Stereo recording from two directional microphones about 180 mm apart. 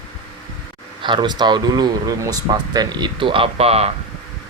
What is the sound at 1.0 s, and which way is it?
Speech, 25° right (ahead or behind).